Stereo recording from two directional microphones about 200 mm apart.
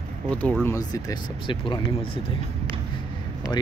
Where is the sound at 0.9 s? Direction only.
20° left (ahead or behind).